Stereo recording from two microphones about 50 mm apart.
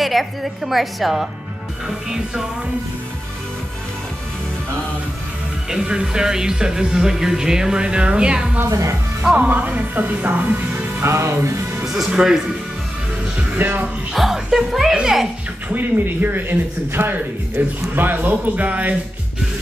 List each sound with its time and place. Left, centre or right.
0.0 s a woman's voice: centre
5.7 s speech: centre
8.6 s speech: right
9.2 s speech: right
11.0 s music: right
11.8 s speech: centre
13.4 s speech: right
14.1 s a woman's voice: centre
15.7 s speech: right